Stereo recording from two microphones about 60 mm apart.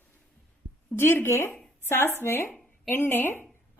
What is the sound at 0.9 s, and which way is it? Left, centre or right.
A woman's voice, left.